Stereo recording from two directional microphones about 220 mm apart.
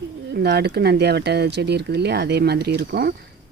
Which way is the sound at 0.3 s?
50° right (ahead or behind).